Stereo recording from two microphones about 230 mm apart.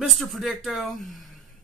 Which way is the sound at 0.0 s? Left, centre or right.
Centre.